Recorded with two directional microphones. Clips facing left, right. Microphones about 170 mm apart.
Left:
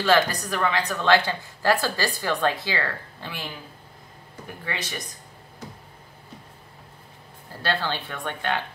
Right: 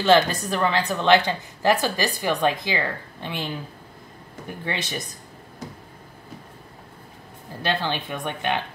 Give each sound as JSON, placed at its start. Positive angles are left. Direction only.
{"t": 0.0, "sound": "speech", "side_deg": -25}
{"t": 4.6, "sound": "speech", "side_deg": -25}
{"t": 7.6, "sound": "speech", "side_deg": -20}